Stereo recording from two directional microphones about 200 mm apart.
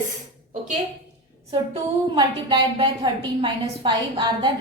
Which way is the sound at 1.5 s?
25° right (ahead or behind).